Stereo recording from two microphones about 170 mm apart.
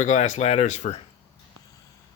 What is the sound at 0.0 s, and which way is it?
Speech, 45° left (ahead or behind).